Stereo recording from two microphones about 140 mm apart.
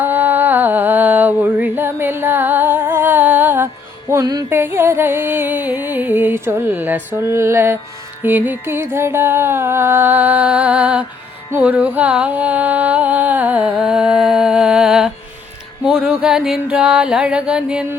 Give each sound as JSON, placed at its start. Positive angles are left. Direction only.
{"t": 0.0, "sound": "a sound", "side_deg": -15}
{"t": 4.1, "sound": "speech", "side_deg": -25}
{"t": 4.4, "sound": "music", "side_deg": -15}